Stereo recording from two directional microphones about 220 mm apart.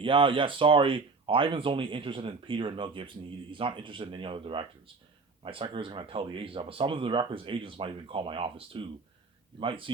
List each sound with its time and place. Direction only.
0.0 s speech: 25° right (ahead or behind)